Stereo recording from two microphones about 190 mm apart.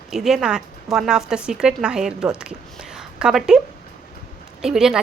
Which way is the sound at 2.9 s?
Centre (ahead or behind).